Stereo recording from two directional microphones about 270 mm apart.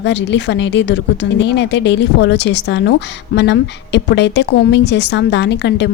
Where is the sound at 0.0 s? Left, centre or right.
Left.